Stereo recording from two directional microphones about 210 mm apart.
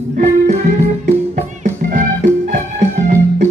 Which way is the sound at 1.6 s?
40° right (ahead or behind).